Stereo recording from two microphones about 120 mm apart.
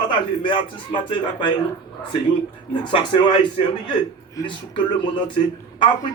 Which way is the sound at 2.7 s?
40° left (ahead or behind).